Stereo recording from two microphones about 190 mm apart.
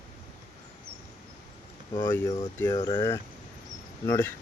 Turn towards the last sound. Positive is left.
turn(degrees=10)  # may be behind; listen again after turning